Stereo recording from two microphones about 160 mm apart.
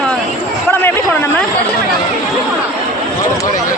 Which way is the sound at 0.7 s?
10° left (ahead or behind).